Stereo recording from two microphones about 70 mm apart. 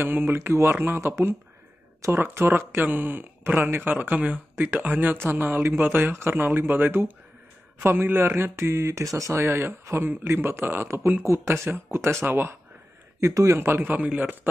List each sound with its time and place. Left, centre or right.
0.0 s speech: right
2.1 s speech: right
13.6 s speech: right
14.0 s a man's voice: centre